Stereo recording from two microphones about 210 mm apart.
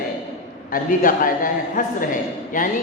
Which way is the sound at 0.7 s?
40° left (ahead or behind).